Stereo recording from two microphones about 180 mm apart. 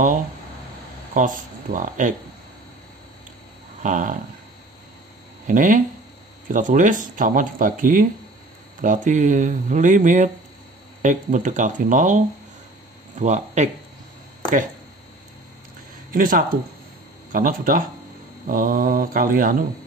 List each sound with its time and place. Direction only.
1.1 s speech: 45° right (ahead or behind)
3.8 s speech: 45° right (ahead or behind)
5.5 s speech: 45° right (ahead or behind)
13.2 s speech: 40° right (ahead or behind)
16.1 s speech: 50° right (ahead or behind)